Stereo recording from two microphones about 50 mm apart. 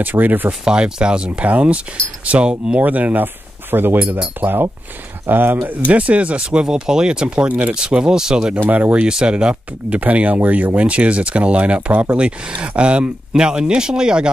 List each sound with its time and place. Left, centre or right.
0.0 s speech: right
0.5 s speech: centre; by 5.8 s right
5.9 s speech: right
7.4 s speech: right
7.7 s speech: centre
8.5 s speech: right
9.1 s speech: centre
11.9 s speech: right
12.2 s speech: right